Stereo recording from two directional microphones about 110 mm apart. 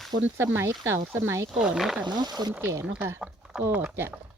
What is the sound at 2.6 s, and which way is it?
Speech, 25° right (ahead or behind).